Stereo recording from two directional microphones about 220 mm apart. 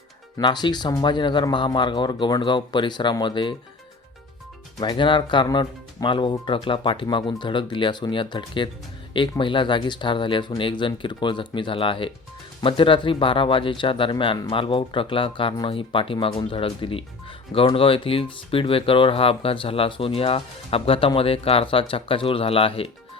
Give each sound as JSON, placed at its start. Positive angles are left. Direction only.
{"t": 0.3, "sound": "speech", "side_deg": 20}
{"t": 4.8, "sound": "speech", "side_deg": 20}